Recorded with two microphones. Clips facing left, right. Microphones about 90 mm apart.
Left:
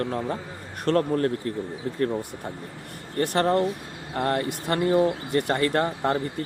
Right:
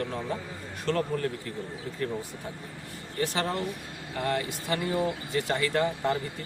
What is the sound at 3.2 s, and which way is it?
Speech, 55° left (ahead or behind).